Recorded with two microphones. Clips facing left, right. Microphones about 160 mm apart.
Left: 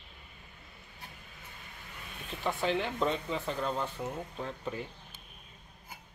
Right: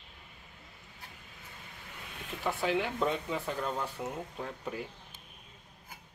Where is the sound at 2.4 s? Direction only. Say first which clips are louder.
Even; 5° right (ahead or behind).